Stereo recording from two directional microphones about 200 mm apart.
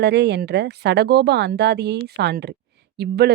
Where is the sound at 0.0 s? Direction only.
55° right (ahead or behind).